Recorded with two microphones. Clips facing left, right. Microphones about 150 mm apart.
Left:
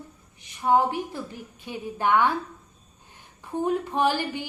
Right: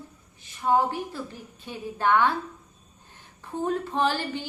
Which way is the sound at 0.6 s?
15° left (ahead or behind).